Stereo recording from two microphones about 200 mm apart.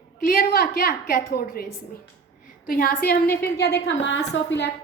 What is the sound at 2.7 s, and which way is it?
A woman's voice, 45° left (ahead or behind).